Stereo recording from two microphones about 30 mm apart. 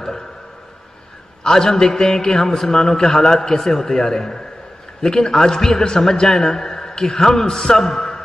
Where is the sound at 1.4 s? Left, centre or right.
Left.